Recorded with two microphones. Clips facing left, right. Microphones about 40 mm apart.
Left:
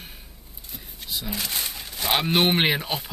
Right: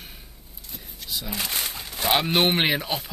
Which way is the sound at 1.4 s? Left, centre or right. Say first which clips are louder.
Right 1 dB; right.